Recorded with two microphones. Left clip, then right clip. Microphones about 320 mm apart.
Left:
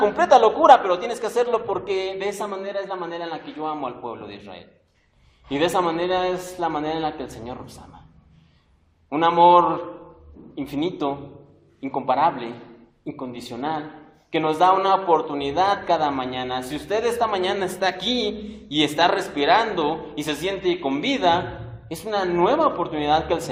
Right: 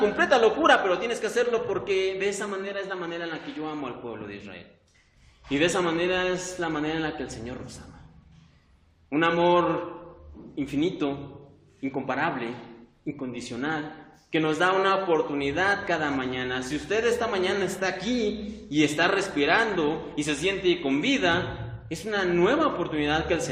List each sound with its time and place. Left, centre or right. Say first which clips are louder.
0.0 s a man's voice: left 5 dB; centre
10.5 s a man's voice: left 1 dB; centre